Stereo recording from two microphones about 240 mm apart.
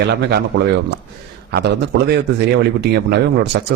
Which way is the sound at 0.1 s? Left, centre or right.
Right.